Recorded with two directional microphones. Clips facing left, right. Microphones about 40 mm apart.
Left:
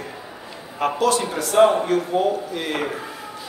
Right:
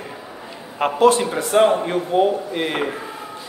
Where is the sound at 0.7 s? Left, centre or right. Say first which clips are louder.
Right 5 dB; right.